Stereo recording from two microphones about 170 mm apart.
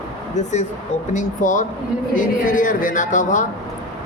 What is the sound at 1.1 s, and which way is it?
A woman's voice, 50° left (ahead or behind).